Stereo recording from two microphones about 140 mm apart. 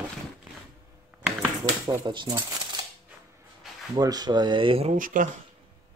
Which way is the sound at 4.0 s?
30° right (ahead or behind).